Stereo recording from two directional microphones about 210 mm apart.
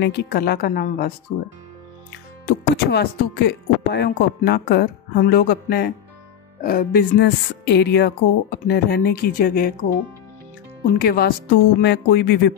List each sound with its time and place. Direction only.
0.0 s speech: 50° left (ahead or behind)
2.4 s speech: 50° left (ahead or behind)
10.9 s speech: 45° left (ahead or behind)